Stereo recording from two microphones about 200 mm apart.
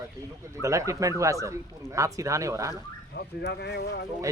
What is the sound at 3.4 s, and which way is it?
Speech, 55° left (ahead or behind).